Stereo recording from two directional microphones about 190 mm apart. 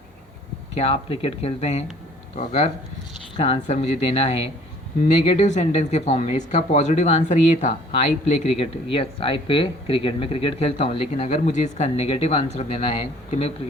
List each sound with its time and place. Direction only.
0.7 s speech: 35° left (ahead or behind)